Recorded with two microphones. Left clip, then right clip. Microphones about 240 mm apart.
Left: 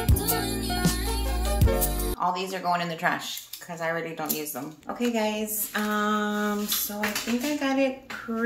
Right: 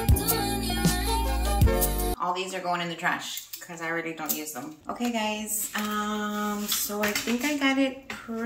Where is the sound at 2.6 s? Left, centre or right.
Left.